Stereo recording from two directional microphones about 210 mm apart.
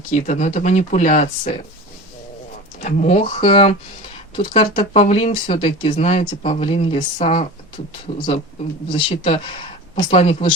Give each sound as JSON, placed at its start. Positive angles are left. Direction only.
{"t": 0.1, "sound": "speech", "side_deg": 35}
{"t": 2.8, "sound": "speech", "side_deg": 35}
{"t": 8.9, "sound": "speech", "side_deg": 20}